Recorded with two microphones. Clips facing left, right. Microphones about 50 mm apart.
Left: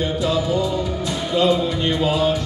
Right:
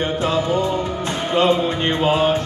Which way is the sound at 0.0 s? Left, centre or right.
Right.